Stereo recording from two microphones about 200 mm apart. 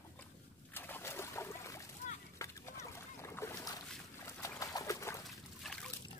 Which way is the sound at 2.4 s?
15° left (ahead or behind).